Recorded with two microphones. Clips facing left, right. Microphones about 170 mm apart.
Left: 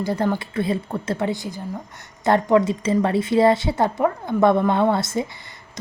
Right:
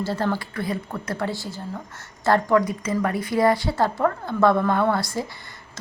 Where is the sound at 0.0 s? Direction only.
15° left (ahead or behind).